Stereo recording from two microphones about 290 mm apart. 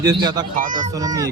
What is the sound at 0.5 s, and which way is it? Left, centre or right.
Speech, right.